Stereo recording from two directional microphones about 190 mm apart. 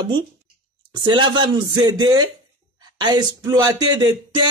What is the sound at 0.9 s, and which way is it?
Speech, 25° right (ahead or behind).